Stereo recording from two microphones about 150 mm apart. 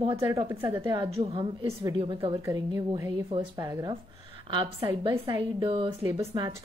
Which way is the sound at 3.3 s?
35° right (ahead or behind).